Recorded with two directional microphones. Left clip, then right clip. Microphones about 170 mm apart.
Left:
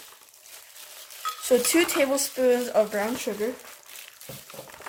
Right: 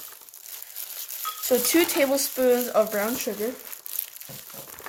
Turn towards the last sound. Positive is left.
turn(degrees=-15)  # may be behind; listen again after turning